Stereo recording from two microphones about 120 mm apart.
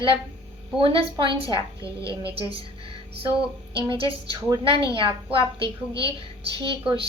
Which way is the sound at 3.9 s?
45° right (ahead or behind).